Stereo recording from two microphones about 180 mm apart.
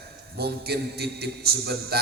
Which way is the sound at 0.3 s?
65° right (ahead or behind).